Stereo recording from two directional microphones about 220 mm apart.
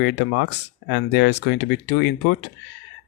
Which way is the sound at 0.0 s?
50° left (ahead or behind).